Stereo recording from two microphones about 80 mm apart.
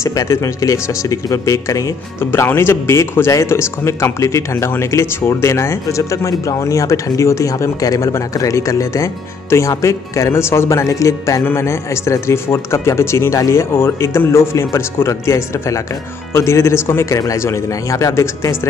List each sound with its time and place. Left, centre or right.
0.0 s speech: left
2.1 s speech: left